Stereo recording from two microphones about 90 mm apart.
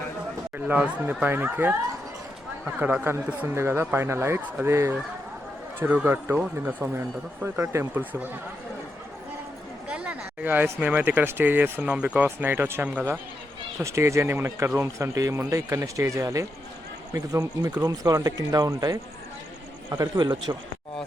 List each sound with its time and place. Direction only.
0.7 s speech: 15° right (ahead or behind)
2.7 s speech: 20° right (ahead or behind)
9.9 s speech: 15° right (ahead or behind)
13.8 s speech: 35° right (ahead or behind)
19.9 s speech: 55° right (ahead or behind)